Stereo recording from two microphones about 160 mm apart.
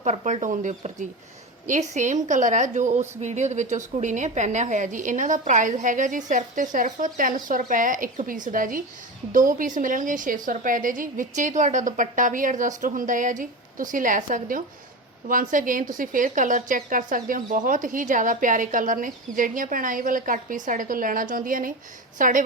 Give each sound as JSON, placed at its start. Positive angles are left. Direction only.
{"t": 0.0, "sound": "a woman's voice", "side_deg": -45}